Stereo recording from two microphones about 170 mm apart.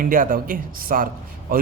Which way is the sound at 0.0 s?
55° right (ahead or behind).